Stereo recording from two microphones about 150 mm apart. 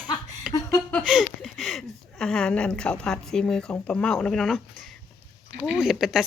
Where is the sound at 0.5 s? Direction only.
Centre (ahead or behind).